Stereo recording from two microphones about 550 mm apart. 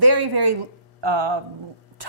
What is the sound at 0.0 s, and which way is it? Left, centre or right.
A woman's voice, right.